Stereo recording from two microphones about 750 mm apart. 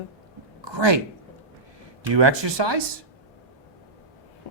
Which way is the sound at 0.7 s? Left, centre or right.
Right.